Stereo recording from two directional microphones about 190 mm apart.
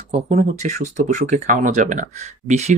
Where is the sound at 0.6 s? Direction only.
40° right (ahead or behind).